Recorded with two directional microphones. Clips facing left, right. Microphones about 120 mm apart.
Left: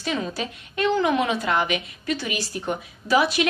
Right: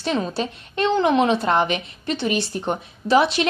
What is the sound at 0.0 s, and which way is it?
A woman's voice, 30° right (ahead or behind).